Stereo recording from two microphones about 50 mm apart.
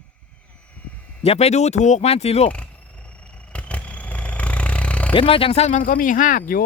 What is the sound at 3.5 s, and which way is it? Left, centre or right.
Vehicle, left.